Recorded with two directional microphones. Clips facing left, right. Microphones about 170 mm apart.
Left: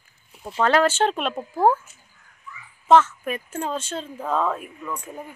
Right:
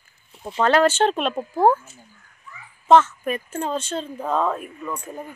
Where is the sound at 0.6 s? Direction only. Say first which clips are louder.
Right 2 dB; 10° left (ahead or behind).